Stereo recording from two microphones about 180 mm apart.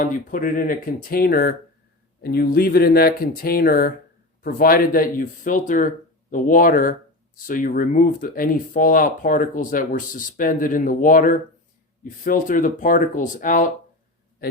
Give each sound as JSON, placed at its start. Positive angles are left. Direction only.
{"t": 0.0, "sound": "speech", "side_deg": 50}